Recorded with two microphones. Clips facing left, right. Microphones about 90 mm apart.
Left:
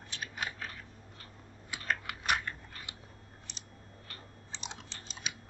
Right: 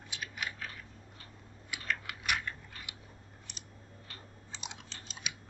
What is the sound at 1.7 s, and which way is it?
Typing, 35° left (ahead or behind).